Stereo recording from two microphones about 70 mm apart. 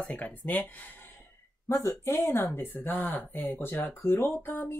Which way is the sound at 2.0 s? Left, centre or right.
Left.